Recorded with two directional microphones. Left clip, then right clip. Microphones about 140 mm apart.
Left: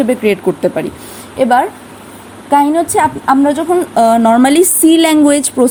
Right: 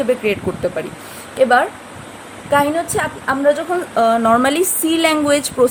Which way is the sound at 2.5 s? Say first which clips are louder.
Left 6 dB; 45° left (ahead or behind).